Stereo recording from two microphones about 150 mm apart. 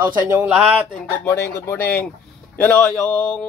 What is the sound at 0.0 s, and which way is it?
Speech, 30° right (ahead or behind).